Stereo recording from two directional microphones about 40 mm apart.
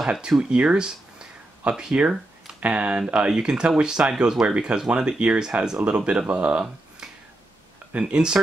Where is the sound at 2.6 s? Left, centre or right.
Right.